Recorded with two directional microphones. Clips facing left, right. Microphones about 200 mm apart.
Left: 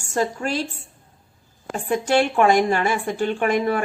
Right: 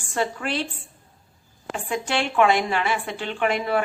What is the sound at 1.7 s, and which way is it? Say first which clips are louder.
A woman's voice: left 6 dB; 45° left (ahead or behind).